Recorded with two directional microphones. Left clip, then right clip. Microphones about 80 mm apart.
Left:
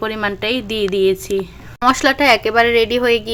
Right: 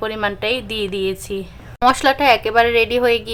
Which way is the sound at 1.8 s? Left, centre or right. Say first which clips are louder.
Even; centre.